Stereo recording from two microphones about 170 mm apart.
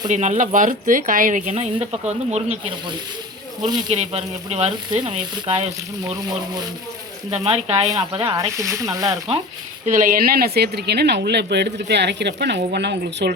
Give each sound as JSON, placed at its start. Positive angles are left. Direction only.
{"t": 0.1, "sound": "speech", "side_deg": -45}
{"t": 3.9, "sound": "speech", "side_deg": -40}
{"t": 7.3, "sound": "speech", "side_deg": -35}
{"t": 7.9, "sound": "speech", "side_deg": -25}
{"t": 9.8, "sound": "a woman's voice", "side_deg": -50}